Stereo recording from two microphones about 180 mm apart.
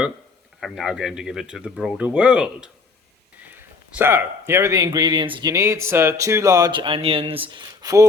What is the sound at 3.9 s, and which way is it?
Speech, 10° right (ahead or behind).